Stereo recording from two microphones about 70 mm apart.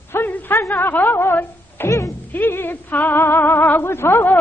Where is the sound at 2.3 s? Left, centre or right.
Left.